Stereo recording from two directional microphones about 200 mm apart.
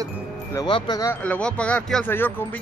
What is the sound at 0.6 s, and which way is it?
Speech, 20° left (ahead or behind).